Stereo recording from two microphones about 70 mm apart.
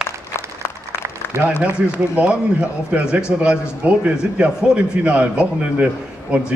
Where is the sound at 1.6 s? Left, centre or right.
Centre.